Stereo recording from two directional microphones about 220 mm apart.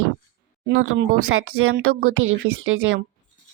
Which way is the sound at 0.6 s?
60° right (ahead or behind).